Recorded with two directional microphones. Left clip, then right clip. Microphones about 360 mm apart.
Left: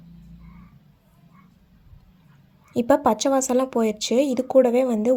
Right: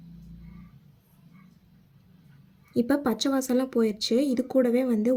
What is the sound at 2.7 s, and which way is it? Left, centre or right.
A woman's voice, centre.